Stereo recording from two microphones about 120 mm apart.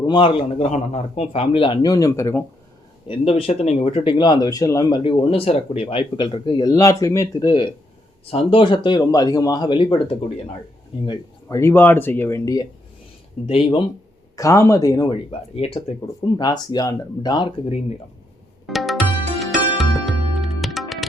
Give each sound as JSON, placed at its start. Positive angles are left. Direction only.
{"t": 0.0, "sound": "a man's voice", "side_deg": 45}
{"t": 1.8, "sound": "speech", "side_deg": 30}
{"t": 3.1, "sound": "speech", "side_deg": 50}
{"t": 5.0, "sound": "speech", "side_deg": 50}
{"t": 6.7, "sound": "speech", "side_deg": 25}
{"t": 8.2, "sound": "speech", "side_deg": 55}
{"t": 11.4, "sound": "speech", "side_deg": 25}
{"t": 13.5, "sound": "speech", "side_deg": 45}
{"t": 14.3, "sound": "speech", "side_deg": 25}
{"t": 15.3, "sound": "a man's voice", "side_deg": 55}
{"t": 16.2, "sound": "speech", "side_deg": 35}
{"t": 18.6, "sound": "music", "side_deg": 0}